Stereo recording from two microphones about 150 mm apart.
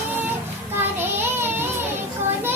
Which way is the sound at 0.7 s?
15° right (ahead or behind).